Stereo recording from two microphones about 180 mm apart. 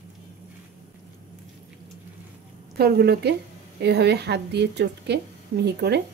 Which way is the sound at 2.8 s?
65° right (ahead or behind).